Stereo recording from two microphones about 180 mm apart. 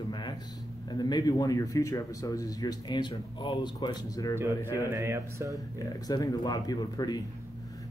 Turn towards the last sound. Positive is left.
turn(degrees=20)  # may be behind; listen again after turning